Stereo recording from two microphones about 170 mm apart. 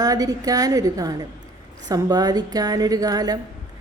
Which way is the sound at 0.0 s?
20° right (ahead or behind).